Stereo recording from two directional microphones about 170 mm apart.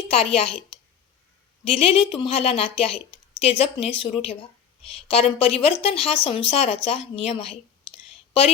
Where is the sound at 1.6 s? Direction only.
30° left (ahead or behind).